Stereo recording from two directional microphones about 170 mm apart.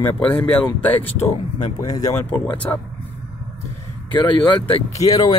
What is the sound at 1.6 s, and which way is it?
Speech, 20° left (ahead or behind).